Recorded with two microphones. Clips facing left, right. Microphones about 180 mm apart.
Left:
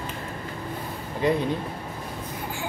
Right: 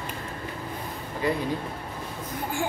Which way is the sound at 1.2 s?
20° left (ahead or behind).